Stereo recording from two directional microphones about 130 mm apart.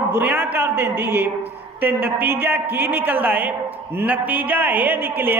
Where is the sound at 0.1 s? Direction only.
15° right (ahead or behind).